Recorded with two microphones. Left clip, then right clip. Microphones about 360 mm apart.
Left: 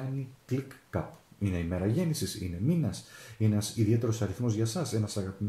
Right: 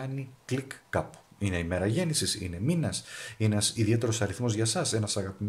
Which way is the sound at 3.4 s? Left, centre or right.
Right.